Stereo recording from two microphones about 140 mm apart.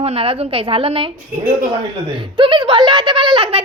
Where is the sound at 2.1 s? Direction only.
35° right (ahead or behind).